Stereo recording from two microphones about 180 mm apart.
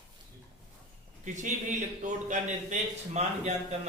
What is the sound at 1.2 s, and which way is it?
A man's voice, 45° right (ahead or behind).